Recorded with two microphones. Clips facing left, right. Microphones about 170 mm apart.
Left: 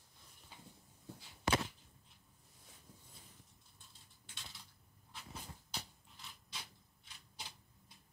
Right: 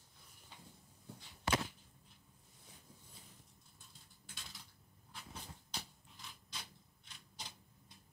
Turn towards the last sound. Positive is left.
turn(degrees=5)  # may be behind; listen again after turning